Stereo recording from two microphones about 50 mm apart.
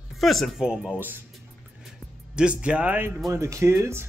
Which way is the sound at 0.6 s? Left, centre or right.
Centre.